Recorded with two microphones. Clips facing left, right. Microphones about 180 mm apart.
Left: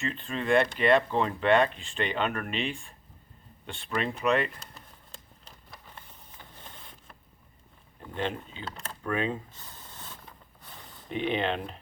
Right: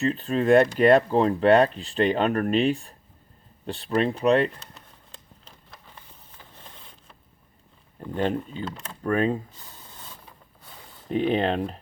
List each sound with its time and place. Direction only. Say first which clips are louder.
0.0 s speech: right 9 dB; 40° right (ahead or behind)
8.1 s speech: right 7 dB; 45° right (ahead or behind)
8.7 s speech: right 2 dB; centre (ahead or behind)
9.0 s speech: right 7 dB; 40° right (ahead or behind)
10.2 s mechanisms: right 1 dB; 5° right (ahead or behind)
11.3 s speech: right 4 dB; 40° right (ahead or behind)